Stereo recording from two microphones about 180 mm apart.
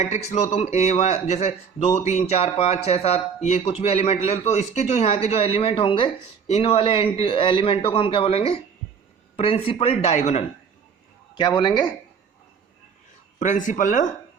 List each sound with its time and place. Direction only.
0.0 s speech: 40° left (ahead or behind)
11.3 s speech: 25° left (ahead or behind)
13.4 s speech: 45° left (ahead or behind)